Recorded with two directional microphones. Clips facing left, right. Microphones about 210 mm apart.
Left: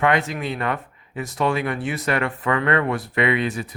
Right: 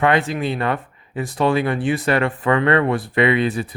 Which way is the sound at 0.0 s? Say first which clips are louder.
Right 3 dB; 30° right (ahead or behind).